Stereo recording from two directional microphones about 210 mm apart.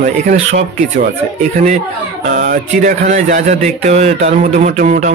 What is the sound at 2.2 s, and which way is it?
Speech, 35° right (ahead or behind).